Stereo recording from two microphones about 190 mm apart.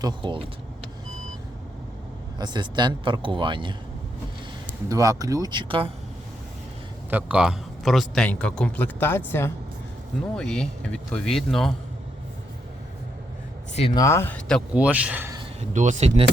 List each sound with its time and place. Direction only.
0.0 s speech: 25° right (ahead or behind)
2.4 s speech: 20° right (ahead or behind)
7.1 s a man's voice: 5° right (ahead or behind)
13.7 s speech: 30° left (ahead or behind)
14.0 s speech: 15° left (ahead or behind)
14.8 s speech: 5° right (ahead or behind)
15.7 s speech: 40° right (ahead or behind)